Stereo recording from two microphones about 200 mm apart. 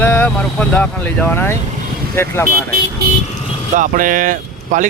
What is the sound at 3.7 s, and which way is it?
Speech, 40° right (ahead or behind).